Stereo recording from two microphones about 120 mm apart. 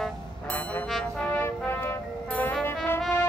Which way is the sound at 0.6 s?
15° left (ahead or behind).